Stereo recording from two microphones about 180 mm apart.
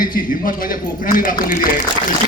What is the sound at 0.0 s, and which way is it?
A man's voice, 50° left (ahead or behind).